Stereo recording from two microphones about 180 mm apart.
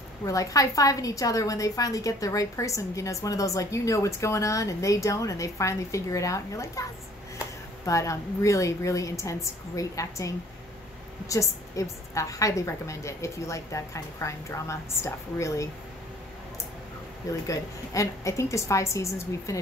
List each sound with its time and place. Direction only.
0.2 s a woman's voice: 20° left (ahead or behind)
17.5 s a woman's voice: 15° left (ahead or behind)